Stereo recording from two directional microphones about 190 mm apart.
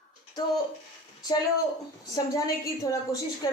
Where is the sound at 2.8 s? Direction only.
15° left (ahead or behind).